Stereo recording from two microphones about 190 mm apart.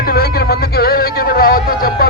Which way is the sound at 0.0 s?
55° left (ahead or behind).